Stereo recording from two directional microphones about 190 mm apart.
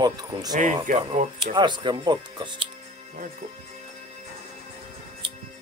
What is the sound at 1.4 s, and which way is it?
Speech, 25° right (ahead or behind).